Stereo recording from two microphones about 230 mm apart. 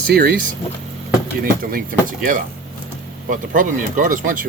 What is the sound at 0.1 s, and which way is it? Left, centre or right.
Speech, right.